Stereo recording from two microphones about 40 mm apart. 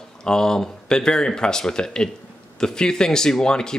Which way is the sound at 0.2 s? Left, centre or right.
Centre.